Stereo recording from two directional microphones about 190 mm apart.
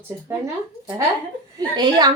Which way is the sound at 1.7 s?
25° right (ahead or behind).